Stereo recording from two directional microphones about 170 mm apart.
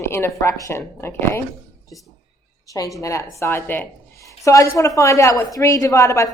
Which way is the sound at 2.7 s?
20° left (ahead or behind).